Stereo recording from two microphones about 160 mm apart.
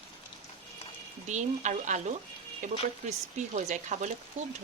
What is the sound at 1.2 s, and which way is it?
Speech, 50° right (ahead or behind).